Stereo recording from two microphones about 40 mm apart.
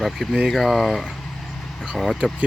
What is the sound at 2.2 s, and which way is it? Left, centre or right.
Speech, right.